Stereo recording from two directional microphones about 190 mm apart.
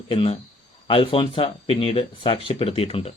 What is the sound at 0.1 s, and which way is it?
Speech, 30° left (ahead or behind).